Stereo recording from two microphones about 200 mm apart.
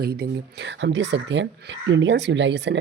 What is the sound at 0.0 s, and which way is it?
Speech, 50° right (ahead or behind).